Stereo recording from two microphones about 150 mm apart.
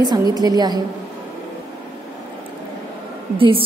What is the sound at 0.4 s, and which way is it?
Speech, 25° right (ahead or behind).